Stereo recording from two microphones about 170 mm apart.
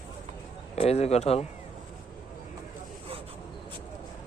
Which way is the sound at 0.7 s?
40° left (ahead or behind).